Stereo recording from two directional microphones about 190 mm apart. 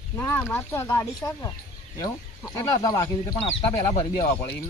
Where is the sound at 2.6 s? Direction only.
20° left (ahead or behind).